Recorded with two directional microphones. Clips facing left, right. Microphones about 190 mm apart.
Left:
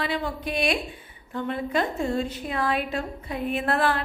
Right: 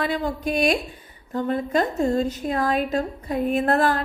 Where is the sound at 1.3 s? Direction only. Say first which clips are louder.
Right 4 dB; 40° right (ahead or behind).